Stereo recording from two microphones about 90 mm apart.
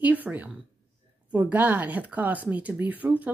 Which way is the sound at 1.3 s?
20° right (ahead or behind).